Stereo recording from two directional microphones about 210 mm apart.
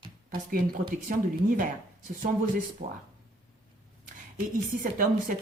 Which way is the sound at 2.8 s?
35° right (ahead or behind).